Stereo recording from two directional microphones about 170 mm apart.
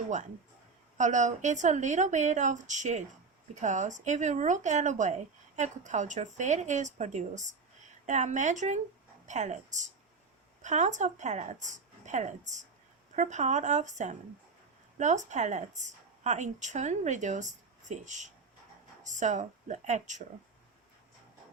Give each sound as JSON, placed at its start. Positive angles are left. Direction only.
{"t": 0.9, "sound": "speech", "side_deg": -45}